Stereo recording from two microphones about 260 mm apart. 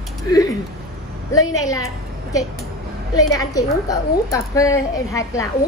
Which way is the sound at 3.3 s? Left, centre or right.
Centre.